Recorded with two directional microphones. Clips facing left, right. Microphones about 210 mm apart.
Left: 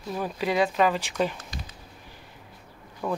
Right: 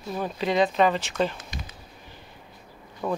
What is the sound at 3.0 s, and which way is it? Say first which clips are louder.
Speech: right 1 dB; 5° right (ahead or behind).